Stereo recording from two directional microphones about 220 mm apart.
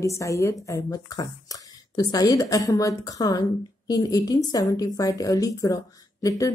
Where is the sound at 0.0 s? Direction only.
15° left (ahead or behind).